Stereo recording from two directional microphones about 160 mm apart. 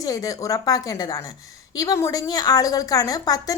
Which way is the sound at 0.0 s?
20° left (ahead or behind).